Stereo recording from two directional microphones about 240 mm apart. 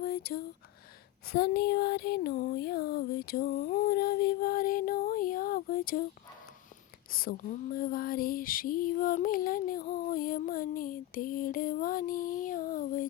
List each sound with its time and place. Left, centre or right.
0.0 s a sound: left
1.3 s female singing: left
7.1 s female singing: left